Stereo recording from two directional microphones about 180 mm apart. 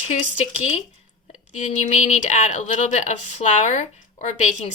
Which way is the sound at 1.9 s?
40° left (ahead or behind).